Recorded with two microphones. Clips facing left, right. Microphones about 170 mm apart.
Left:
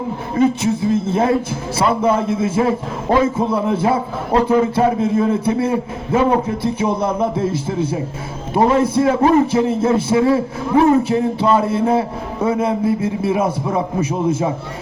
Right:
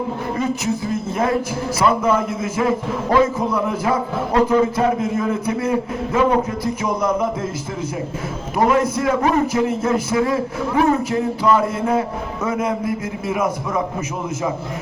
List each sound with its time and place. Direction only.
0.3 s a man's voice: 30° left (ahead or behind)